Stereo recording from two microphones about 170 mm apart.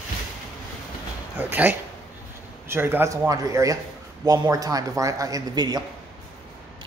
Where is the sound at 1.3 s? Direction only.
10° right (ahead or behind).